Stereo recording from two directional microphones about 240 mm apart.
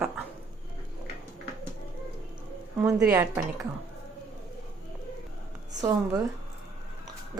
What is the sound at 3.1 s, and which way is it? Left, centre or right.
Speech, centre.